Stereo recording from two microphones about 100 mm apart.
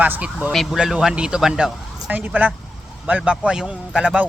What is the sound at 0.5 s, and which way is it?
Speech, centre (ahead or behind).